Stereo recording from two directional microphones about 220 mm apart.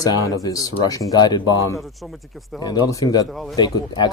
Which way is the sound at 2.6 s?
15° left (ahead or behind).